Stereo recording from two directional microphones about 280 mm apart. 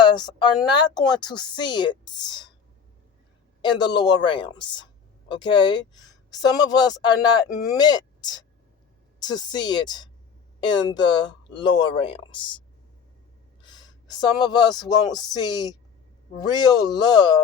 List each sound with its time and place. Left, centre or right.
0.9 s speech: centre
3.6 s speech: centre
13.6 s speech: centre